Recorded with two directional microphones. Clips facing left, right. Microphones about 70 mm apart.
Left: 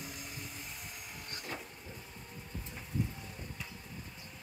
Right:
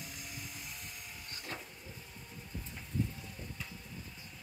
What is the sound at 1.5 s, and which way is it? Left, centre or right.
Vehicle, centre.